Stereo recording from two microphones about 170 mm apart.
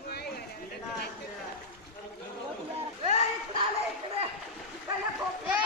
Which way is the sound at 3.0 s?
40° right (ahead or behind).